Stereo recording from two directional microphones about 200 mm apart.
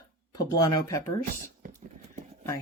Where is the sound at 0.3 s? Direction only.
20° left (ahead or behind).